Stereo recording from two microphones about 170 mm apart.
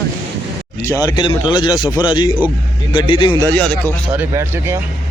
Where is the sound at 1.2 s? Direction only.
25° left (ahead or behind).